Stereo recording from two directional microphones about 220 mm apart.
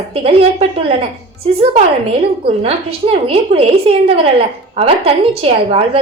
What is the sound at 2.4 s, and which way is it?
A woman's voice, 25° right (ahead or behind).